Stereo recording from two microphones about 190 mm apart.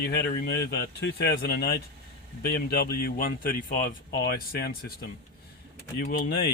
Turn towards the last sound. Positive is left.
turn(degrees=55)  # may be behind; listen again after turning